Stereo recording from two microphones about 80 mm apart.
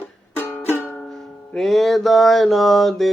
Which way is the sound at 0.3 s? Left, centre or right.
Left.